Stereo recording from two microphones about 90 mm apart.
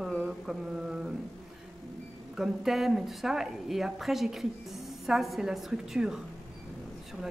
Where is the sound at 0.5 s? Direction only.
5° right (ahead or behind).